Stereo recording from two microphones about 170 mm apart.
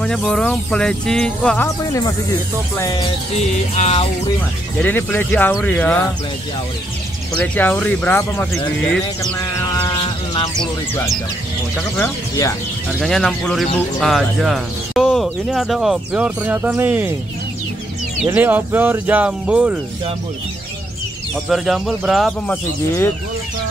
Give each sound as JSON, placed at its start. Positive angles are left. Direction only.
{"t": 0.0, "sound": "speech", "side_deg": 5}
{"t": 1.9, "sound": "speech", "side_deg": 20}
{"t": 3.7, "sound": "music", "side_deg": 40}
{"t": 4.7, "sound": "speech", "side_deg": 10}
{"t": 7.3, "sound": "speech", "side_deg": 10}
{"t": 9.8, "sound": "a sound", "side_deg": 30}
{"t": 12.0, "sound": "speech", "side_deg": 15}
{"t": 13.0, "sound": "speech", "side_deg": 5}
{"t": 18.2, "sound": "speech", "side_deg": -10}
{"t": 21.5, "sound": "speech", "side_deg": 0}